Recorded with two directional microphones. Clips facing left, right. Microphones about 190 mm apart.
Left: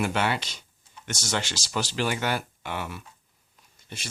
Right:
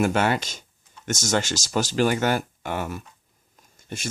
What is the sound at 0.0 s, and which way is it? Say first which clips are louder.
Speech: right 5 dB; 45° right (ahead or behind).